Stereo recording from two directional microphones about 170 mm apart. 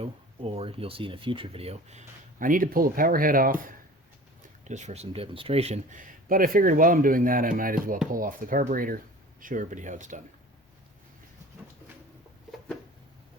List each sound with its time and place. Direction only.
0.0 s speech: 35° right (ahead or behind); by 3.6 s 55° right (ahead or behind)
4.6 s speech: 45° right (ahead or behind)